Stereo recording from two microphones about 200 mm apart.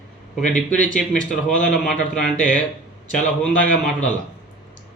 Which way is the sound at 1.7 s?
5° left (ahead or behind).